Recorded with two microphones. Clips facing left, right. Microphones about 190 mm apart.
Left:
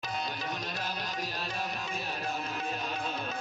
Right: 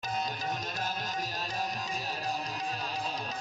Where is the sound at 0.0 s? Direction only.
45° right (ahead or behind).